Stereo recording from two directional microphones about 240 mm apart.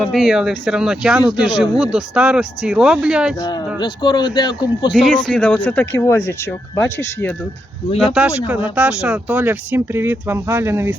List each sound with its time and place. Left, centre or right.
0.0 s speech: centre
3.8 s speech: centre
4.9 s speech: centre
8.4 s speech: centre